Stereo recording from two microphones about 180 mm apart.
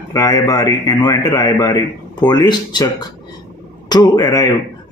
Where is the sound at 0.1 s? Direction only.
20° left (ahead or behind).